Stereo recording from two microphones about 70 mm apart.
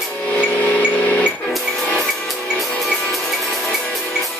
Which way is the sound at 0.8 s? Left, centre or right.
Left.